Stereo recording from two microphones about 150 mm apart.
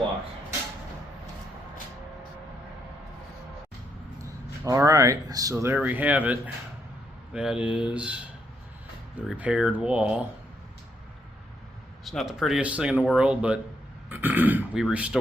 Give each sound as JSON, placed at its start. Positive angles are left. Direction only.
{"t": 4.2, "sound": "speech", "side_deg": -20}
{"t": 9.2, "sound": "speech", "side_deg": -5}
{"t": 12.0, "sound": "speech", "side_deg": 0}